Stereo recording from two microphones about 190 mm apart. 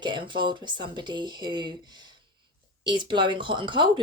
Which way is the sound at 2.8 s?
25° right (ahead or behind).